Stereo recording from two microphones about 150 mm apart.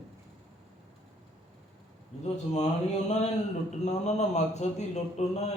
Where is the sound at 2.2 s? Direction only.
50° left (ahead or behind).